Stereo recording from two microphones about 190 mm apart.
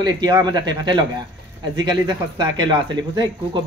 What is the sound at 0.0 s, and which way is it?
Speech, 20° right (ahead or behind).